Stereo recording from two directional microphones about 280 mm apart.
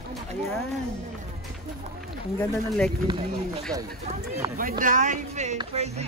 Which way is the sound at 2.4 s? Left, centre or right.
Centre.